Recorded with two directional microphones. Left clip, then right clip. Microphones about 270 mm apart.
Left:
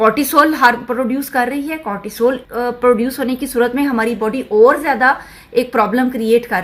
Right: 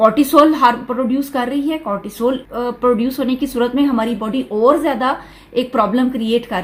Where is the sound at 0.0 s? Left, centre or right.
Left.